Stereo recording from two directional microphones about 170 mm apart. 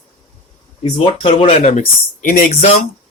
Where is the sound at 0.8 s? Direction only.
30° left (ahead or behind).